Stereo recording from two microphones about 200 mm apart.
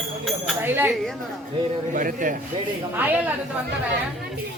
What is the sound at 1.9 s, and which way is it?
Speech, 40° right (ahead or behind).